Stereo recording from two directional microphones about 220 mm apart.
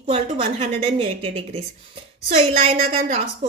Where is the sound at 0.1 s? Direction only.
30° right (ahead or behind).